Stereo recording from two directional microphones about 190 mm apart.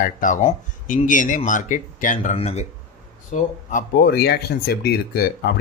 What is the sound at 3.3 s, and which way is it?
Speech, 45° left (ahead or behind).